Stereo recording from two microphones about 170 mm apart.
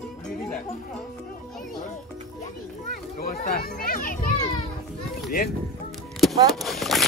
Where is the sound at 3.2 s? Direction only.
60° left (ahead or behind).